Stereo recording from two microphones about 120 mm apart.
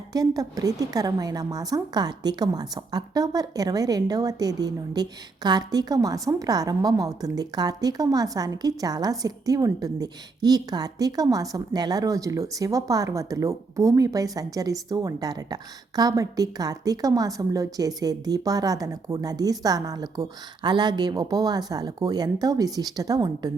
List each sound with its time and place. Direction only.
0.1 s a woman's voice: 30° right (ahead or behind)